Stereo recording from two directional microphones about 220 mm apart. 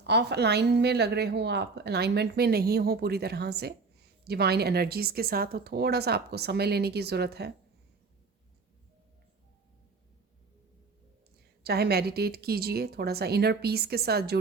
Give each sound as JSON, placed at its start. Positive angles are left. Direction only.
{"t": 0.0, "sound": "a woman's voice", "side_deg": -50}
{"t": 11.6, "sound": "a woman's voice", "side_deg": -45}